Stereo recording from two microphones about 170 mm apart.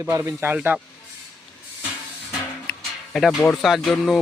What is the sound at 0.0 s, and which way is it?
Speech, 15° right (ahead or behind).